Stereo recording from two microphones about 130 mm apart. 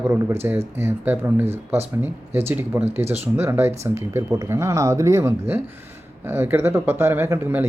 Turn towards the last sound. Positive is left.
turn(degrees=-15)  # may be behind; listen again after turning